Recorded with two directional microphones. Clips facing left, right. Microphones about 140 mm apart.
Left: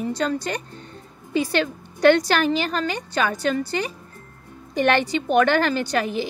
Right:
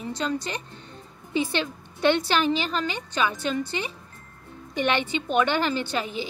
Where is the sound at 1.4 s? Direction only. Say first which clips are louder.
Left 4 dB; 40° left (ahead or behind).